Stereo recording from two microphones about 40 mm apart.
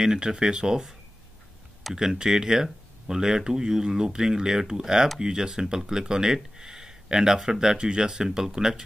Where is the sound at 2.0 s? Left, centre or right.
Centre.